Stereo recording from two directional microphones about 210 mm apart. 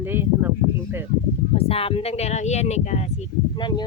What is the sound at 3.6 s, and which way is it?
Speech, 20° left (ahead or behind).